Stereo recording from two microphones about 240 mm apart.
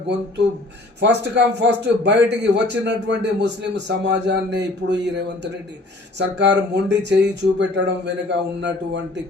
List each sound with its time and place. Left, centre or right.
0.9 s a man's voice: right